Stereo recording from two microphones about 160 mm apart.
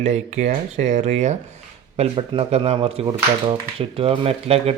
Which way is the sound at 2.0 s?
35° right (ahead or behind).